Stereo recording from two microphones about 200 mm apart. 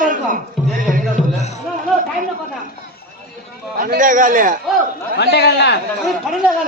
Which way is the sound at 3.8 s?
40° right (ahead or behind).